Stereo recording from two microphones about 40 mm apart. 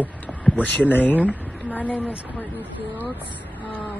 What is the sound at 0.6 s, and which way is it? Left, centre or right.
Speech, left.